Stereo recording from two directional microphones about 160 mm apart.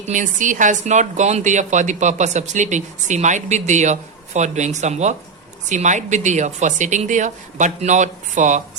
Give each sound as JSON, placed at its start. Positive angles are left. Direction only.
{"t": 0.0, "sound": "speech", "side_deg": -50}